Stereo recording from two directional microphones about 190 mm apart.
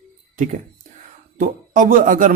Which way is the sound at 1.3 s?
45° right (ahead or behind).